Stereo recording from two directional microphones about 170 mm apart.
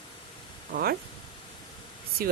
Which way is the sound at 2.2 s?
60° right (ahead or behind).